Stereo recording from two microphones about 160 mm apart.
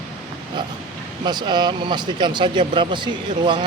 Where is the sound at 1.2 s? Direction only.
30° right (ahead or behind).